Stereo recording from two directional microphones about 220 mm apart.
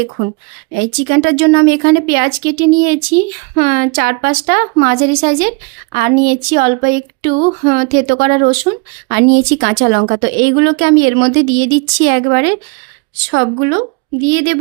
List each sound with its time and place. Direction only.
1.0 s speech: 55° right (ahead or behind); by 8.5 s 40° right (ahead or behind)
9.1 s a woman's voice: 50° right (ahead or behind)